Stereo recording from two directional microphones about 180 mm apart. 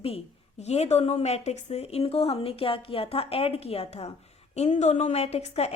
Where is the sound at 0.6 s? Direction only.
35° left (ahead or behind).